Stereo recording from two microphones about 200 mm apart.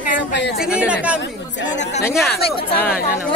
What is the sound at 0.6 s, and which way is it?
Speech, 5° right (ahead or behind).